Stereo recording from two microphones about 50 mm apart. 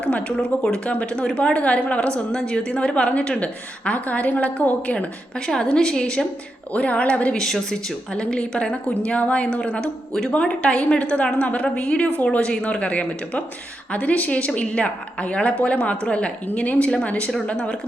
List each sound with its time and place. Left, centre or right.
0.0 s a woman's voice: left
5.5 s a woman's voice: centre
6.7 s a woman's voice: left
7.3 s a woman's voice: centre
8.1 s a woman's voice: centre